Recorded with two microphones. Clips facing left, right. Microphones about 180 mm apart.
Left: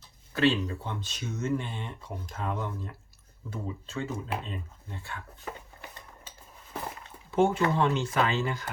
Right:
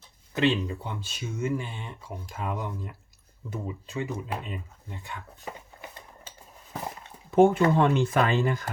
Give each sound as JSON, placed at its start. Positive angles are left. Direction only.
{"t": 0.3, "sound": "speech", "side_deg": -15}
{"t": 7.3, "sound": "speech", "side_deg": -55}